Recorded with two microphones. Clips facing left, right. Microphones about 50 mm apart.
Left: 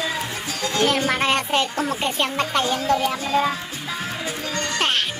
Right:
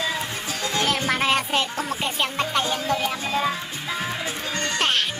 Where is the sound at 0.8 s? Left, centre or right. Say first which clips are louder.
Left 2 dB; centre.